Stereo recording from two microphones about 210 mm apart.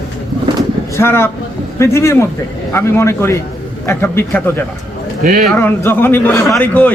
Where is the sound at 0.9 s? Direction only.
10° left (ahead or behind).